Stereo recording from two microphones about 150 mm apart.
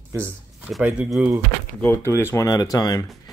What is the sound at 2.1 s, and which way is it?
Speech, 20° left (ahead or behind).